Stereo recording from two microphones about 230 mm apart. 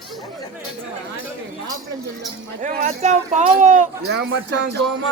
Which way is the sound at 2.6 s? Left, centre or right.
Right.